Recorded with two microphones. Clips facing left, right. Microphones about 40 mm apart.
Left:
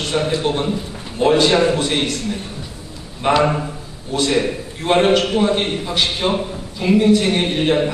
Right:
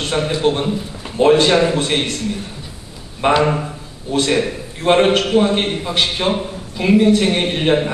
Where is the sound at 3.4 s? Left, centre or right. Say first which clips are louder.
Even; centre.